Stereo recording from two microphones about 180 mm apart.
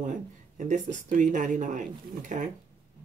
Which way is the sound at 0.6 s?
40° right (ahead or behind).